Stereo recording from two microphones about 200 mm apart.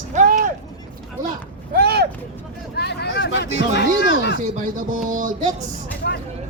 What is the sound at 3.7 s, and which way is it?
Speech, 55° left (ahead or behind).